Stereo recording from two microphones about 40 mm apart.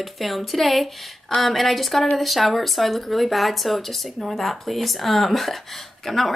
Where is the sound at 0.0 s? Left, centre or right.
Centre.